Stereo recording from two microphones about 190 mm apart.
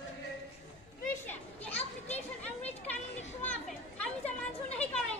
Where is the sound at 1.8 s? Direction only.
35° left (ahead or behind).